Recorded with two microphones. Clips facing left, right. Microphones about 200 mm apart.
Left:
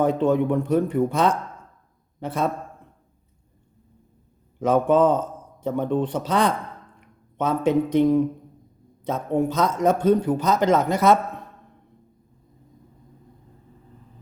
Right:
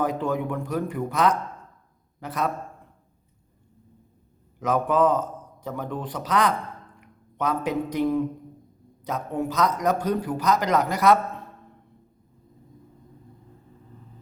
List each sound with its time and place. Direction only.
0.0 s a man's voice: 25° left (ahead or behind)
4.6 s a man's voice: 30° left (ahead or behind)